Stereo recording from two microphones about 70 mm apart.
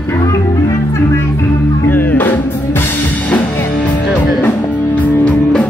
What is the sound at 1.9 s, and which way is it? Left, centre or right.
Music, left.